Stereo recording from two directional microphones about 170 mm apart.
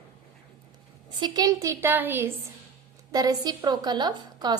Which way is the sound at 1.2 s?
25° right (ahead or behind).